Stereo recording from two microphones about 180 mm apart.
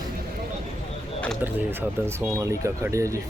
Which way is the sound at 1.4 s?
10° right (ahead or behind).